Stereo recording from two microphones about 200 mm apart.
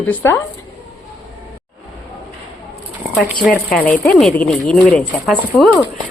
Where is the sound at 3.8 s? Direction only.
5° left (ahead or behind).